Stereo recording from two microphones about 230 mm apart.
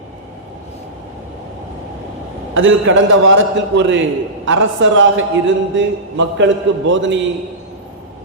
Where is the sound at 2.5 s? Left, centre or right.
Right.